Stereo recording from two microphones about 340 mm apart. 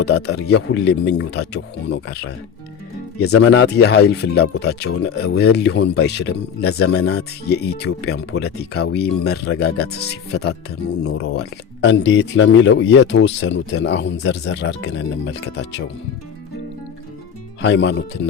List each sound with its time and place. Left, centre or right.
0.2 s speech: left
17.6 s speech: left